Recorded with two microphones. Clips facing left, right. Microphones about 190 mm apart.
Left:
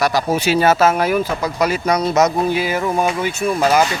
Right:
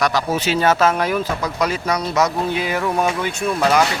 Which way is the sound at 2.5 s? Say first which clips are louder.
Left 2 dB; 5° left (ahead or behind).